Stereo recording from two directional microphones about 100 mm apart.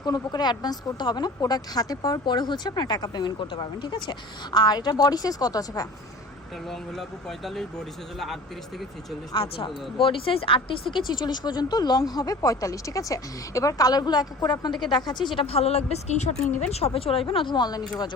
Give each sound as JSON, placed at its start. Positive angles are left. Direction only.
{"t": 0.0, "sound": "a woman's voice", "side_deg": 45}
{"t": 6.7, "sound": "speech", "side_deg": 0}
{"t": 9.3, "sound": "speech", "side_deg": 60}
{"t": 11.1, "sound": "a woman's voice", "side_deg": 45}
{"t": 15.4, "sound": "speech", "side_deg": 90}